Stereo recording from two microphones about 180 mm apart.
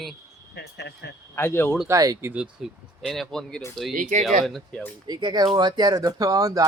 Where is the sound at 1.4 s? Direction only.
10° left (ahead or behind).